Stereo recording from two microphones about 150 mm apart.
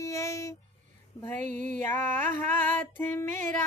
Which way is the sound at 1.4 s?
60° right (ahead or behind).